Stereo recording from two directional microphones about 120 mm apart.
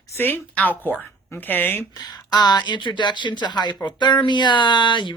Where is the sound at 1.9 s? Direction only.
35° left (ahead or behind).